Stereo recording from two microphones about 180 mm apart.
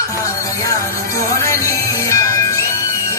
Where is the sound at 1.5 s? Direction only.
15° left (ahead or behind).